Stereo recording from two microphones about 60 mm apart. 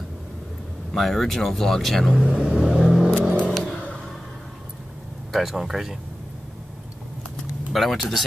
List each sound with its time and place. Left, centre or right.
0.9 s speech: centre
2.5 s vehicle: centre
3.7 s a sound: left
5.3 s speech: centre
7.7 s speech: centre